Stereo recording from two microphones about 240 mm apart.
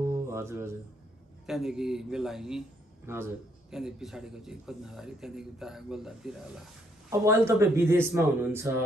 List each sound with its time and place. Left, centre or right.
0.0 s music: centre
1.4 s a man's voice: centre